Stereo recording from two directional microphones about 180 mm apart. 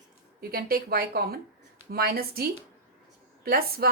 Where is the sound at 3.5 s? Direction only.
60° right (ahead or behind).